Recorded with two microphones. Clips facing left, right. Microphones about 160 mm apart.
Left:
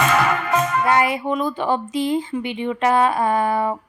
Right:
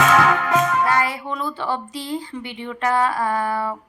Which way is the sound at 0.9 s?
20° left (ahead or behind).